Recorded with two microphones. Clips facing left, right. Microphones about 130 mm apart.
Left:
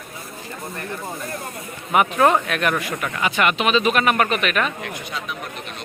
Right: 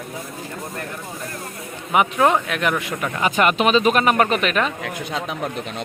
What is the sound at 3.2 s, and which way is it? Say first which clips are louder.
Speech: right 3 dB; 40° right (ahead or behind).